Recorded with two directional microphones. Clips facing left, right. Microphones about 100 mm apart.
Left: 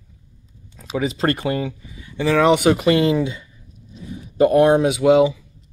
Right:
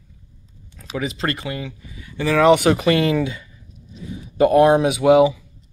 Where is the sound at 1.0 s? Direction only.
35° left (ahead or behind).